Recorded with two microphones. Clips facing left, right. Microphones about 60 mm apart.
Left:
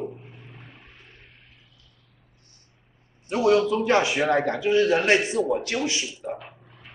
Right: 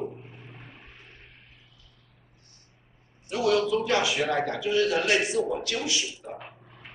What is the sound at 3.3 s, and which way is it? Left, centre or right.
A man's voice, left.